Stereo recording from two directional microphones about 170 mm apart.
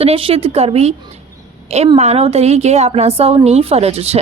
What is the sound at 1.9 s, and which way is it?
A woman's voice, 35° right (ahead or behind).